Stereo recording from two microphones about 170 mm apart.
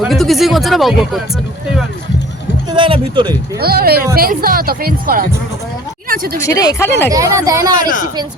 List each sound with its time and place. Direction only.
0.0 s speech: centre (ahead or behind)
2.6 s a woman's voice: 30° right (ahead or behind)
3.6 s speech: 65° right (ahead or behind)
6.4 s speech: 20° left (ahead or behind)
7.1 s a woman's voice: 20° right (ahead or behind)
7.8 s speech: 50° left (ahead or behind)